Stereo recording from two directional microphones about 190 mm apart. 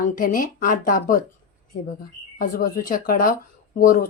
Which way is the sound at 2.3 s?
50° left (ahead or behind).